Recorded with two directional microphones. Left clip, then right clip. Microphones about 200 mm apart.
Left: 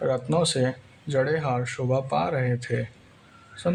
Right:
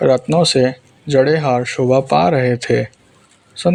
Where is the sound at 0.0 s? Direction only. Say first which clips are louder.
Right 11 dB; 35° right (ahead or behind).